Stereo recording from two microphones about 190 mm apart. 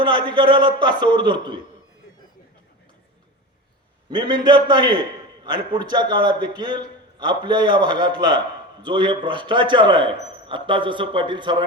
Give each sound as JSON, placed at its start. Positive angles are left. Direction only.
{"t": 0.0, "sound": "a man's voice", "side_deg": -25}
{"t": 4.1, "sound": "a man's voice", "side_deg": -20}